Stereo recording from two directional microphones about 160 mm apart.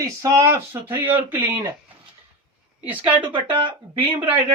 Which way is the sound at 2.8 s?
10° right (ahead or behind).